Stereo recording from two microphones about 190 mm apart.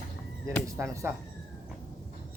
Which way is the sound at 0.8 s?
15° right (ahead or behind).